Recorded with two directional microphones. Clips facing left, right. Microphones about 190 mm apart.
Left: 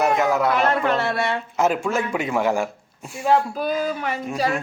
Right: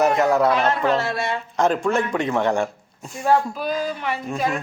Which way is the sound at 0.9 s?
60° left (ahead or behind).